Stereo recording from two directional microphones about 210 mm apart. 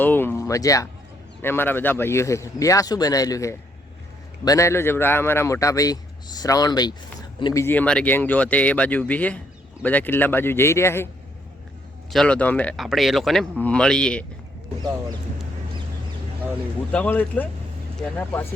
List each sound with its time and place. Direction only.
0.0 s a man's voice: 10° left (ahead or behind)
7.6 s a man's voice: 10° left (ahead or behind)
12.1 s speech: 5° left (ahead or behind)
16.9 s a man's voice: 5° left (ahead or behind)